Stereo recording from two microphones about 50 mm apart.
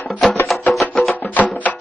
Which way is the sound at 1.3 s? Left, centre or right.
Left.